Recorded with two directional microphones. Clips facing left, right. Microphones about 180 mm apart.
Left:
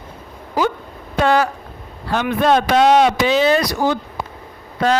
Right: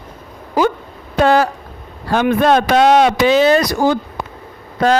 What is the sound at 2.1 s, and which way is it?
Speech, 50° right (ahead or behind).